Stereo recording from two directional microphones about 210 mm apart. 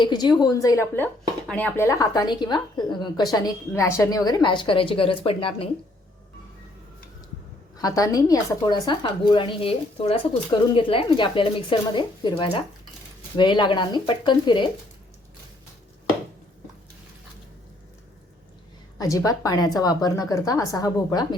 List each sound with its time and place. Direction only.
0.0 s speech: 20° left (ahead or behind)
7.8 s speech: 15° left (ahead or behind)
18.9 s a woman's voice: 15° left (ahead or behind)